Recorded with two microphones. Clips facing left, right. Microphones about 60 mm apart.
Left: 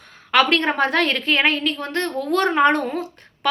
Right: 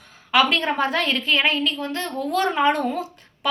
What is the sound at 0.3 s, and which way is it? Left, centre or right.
A woman's voice, left.